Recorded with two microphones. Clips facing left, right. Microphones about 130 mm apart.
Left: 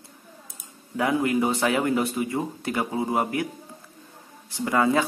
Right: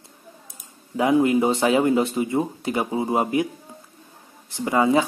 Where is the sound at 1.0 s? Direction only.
20° right (ahead or behind).